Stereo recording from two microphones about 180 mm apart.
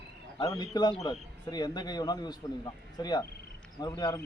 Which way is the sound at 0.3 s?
25° left (ahead or behind).